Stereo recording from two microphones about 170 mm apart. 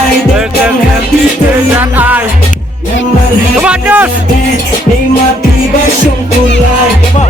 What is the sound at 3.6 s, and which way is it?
Music, 10° right (ahead or behind).